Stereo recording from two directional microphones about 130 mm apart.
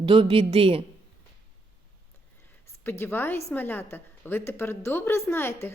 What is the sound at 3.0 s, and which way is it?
A woman's voice, 15° left (ahead or behind).